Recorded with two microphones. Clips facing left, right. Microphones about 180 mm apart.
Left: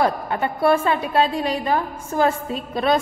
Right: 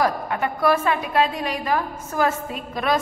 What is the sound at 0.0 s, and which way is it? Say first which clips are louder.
A woman's voice: left 1 dB; 30° left (ahead or behind).